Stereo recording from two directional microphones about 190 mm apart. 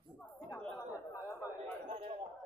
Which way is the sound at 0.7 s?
15° left (ahead or behind).